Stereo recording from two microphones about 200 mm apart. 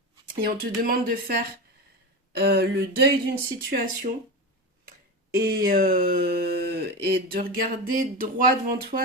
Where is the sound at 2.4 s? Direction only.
55° right (ahead or behind).